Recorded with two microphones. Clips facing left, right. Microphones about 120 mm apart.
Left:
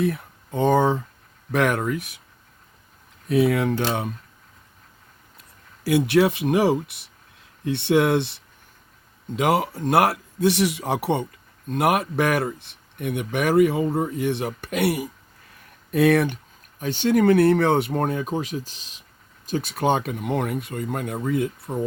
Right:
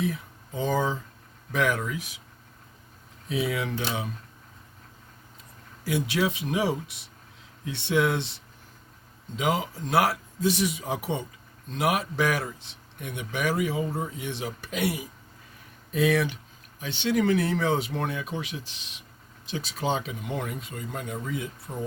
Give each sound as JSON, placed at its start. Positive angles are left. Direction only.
{"t": 0.0, "sound": "speech", "side_deg": 60}
{"t": 3.2, "sound": "speech", "side_deg": 55}
{"t": 5.4, "sound": "speech", "side_deg": 65}
{"t": 11.7, "sound": "speech", "side_deg": 55}
{"t": 18.0, "sound": "speech", "side_deg": 40}
{"t": 19.5, "sound": "speech", "side_deg": 50}